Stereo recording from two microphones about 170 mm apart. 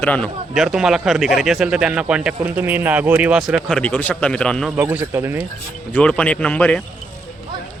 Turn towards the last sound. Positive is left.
turn(degrees=10)  # may be behind; listen again after turning